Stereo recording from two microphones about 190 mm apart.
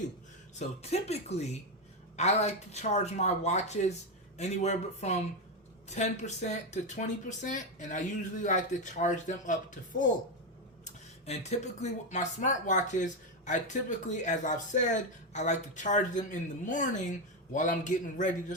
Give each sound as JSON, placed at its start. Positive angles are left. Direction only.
{"t": 0.8, "sound": "speech", "side_deg": 35}